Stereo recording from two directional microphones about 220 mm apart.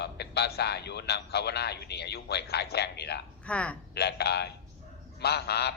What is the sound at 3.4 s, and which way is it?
Speech, 5° left (ahead or behind).